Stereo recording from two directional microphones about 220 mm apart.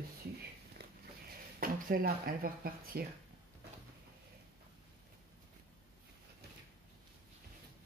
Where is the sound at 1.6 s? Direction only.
40° right (ahead or behind).